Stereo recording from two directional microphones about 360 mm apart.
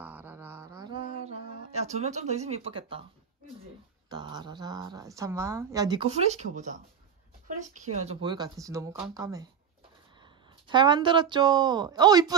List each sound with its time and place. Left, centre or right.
0.0 s mantra: centre
1.2 s speech: centre
4.1 s speech: centre
10.7 s speech: centre